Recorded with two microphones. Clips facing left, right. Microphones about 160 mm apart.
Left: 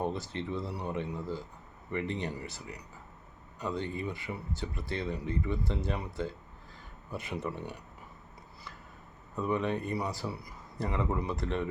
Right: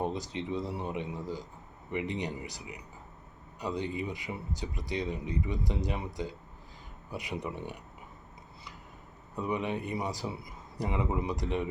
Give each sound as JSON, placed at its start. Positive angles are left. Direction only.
{"t": 0.0, "sound": "speech", "side_deg": -15}
{"t": 9.3, "sound": "speech", "side_deg": -15}